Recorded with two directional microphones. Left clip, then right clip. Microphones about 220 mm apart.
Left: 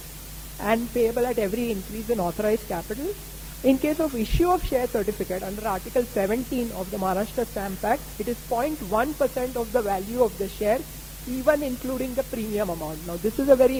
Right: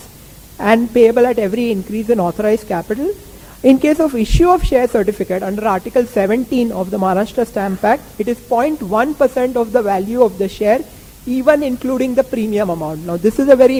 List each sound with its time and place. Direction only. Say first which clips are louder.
0.6 s a woman's voice: right 12 dB; 35° left (ahead or behind)